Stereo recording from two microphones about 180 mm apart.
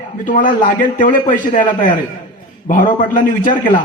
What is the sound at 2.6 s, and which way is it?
Speech, 45° left (ahead or behind).